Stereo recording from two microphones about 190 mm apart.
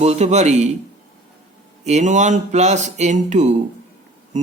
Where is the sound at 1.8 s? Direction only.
40° right (ahead or behind).